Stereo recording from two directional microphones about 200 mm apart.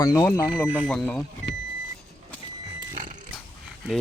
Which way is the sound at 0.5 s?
Centre (ahead or behind).